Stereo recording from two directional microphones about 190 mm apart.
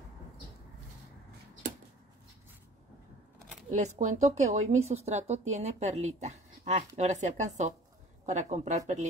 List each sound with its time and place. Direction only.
3.7 s speech: 40° right (ahead or behind)